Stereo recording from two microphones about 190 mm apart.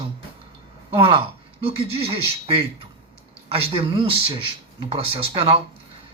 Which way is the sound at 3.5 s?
30° right (ahead or behind).